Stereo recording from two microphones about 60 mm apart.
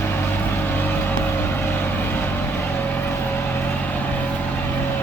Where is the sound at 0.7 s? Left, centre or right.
Left.